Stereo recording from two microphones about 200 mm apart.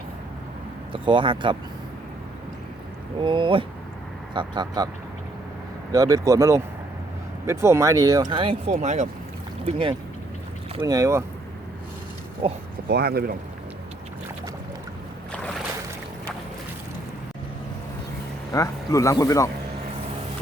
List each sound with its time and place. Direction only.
0.9 s speech: 25° right (ahead or behind)
3.2 s speech: 25° right (ahead or behind)
5.9 s speech: 15° right (ahead or behind)
8.7 s speech: 35° right (ahead or behind)
10.8 s speech: 15° right (ahead or behind)
12.4 s speech: 25° right (ahead or behind)
12.9 s speech: 50° right (ahead or behind)
18.5 s speech: 15° left (ahead or behind)